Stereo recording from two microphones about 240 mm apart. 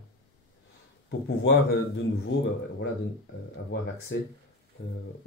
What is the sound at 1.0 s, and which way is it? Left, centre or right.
Speech, left.